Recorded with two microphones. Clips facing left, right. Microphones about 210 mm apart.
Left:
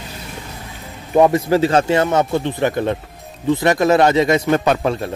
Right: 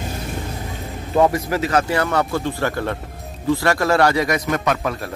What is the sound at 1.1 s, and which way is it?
Speech, 20° left (ahead or behind).